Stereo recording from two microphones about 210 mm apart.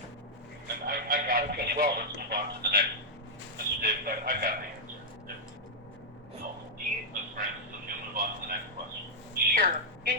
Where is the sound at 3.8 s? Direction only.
40° right (ahead or behind).